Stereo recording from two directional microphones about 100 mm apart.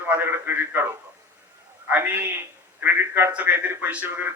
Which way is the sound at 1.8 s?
20° right (ahead or behind).